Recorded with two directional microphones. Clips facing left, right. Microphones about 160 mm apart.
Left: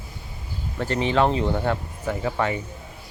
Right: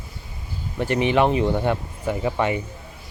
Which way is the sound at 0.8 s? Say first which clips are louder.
Right 2 dB; 15° right (ahead or behind).